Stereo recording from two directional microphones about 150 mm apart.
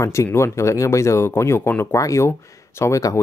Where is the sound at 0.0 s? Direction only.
20° left (ahead or behind).